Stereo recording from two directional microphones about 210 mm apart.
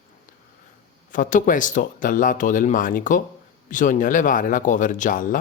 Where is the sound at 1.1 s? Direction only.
40° left (ahead or behind).